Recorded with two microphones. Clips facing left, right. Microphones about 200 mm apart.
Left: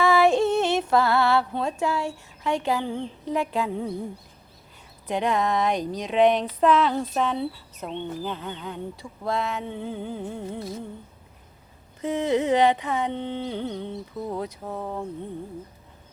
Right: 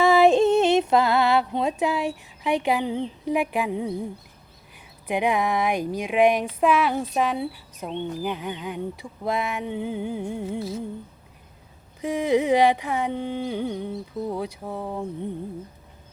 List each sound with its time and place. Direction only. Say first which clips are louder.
0.0 s female singing: right 3 dB; 20° right (ahead or behind)
5.0 s speech: right 1 dB; 10° right (ahead or behind)
11.9 s speech: right 2 dB; 10° right (ahead or behind)